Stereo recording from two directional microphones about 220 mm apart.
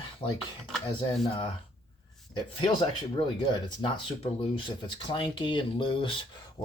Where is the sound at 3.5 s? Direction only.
20° left (ahead or behind).